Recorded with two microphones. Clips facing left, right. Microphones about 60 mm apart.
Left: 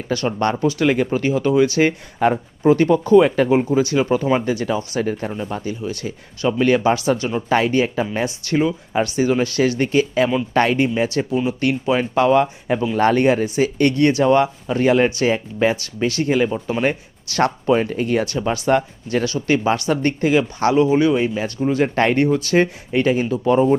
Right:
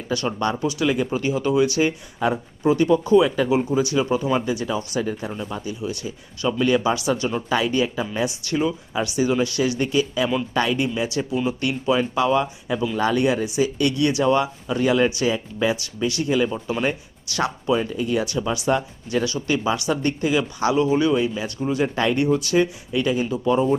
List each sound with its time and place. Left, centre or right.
0.6 s speech: left
4.7 s speech: left
17.4 s speech: left
20.7 s speech: left